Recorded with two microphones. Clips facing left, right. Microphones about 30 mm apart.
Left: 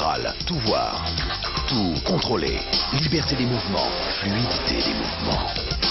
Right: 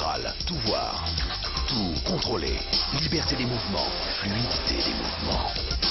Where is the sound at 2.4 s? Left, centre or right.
Centre.